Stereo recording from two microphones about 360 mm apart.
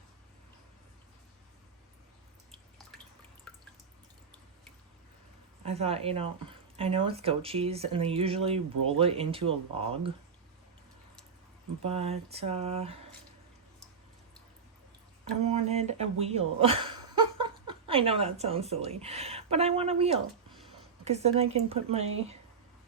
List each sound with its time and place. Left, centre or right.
5.6 s speech: centre
11.8 s speech: centre
15.2 s speech: centre